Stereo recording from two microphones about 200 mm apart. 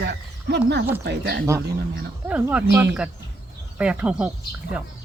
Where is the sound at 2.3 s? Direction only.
10° right (ahead or behind).